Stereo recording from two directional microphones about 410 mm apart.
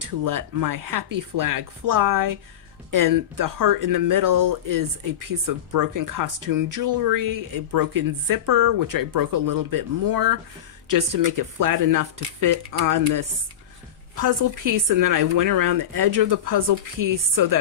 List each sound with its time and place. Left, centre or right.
0.0 s speech: right